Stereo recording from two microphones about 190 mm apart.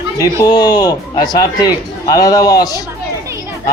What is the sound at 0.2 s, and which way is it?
Speech, 20° left (ahead or behind).